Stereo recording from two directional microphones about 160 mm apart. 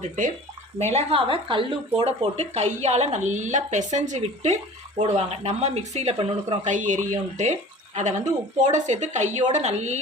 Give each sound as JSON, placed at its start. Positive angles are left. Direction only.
{"t": 0.9, "sound": "speech", "side_deg": -35}
{"t": 6.7, "sound": "speech", "side_deg": -50}